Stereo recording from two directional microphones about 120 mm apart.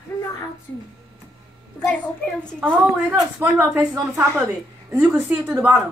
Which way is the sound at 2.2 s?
10° left (ahead or behind).